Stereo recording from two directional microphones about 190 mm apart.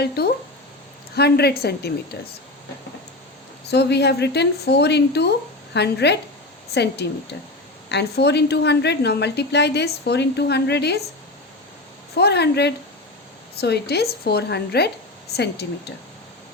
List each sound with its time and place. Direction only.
0.2 s a sound: 55° left (ahead or behind)
1.1 s a woman's voice: 60° left (ahead or behind)
3.7 s a woman's voice: 60° left (ahead or behind)
12.1 s a woman's voice: 60° left (ahead or behind)